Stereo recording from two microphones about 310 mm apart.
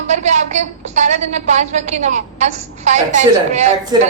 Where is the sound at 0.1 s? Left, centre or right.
Right.